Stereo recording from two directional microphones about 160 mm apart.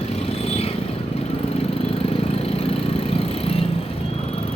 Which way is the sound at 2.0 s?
40° left (ahead or behind).